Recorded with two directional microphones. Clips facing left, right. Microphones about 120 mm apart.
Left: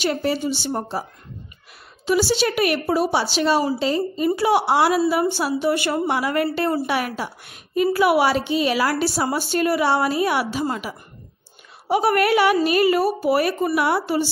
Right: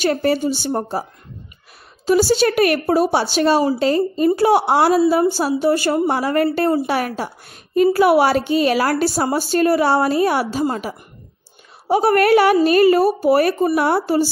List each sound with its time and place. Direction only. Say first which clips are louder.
0.0 s a woman's voice: right 4 dB; 50° right (ahead or behind)
2.0 s a woman's voice: right 5 dB; 40° right (ahead or behind)
4.9 s a woman's voice: right 4 dB; 30° right (ahead or behind); by 6.7 s 45° right (ahead or behind)
6.7 s speech: right 4 dB; 35° right (ahead or behind)
12.2 s a woman's voice: right 6 dB; 50° right (ahead or behind)
13.6 s speech: right 3 dB; 30° right (ahead or behind)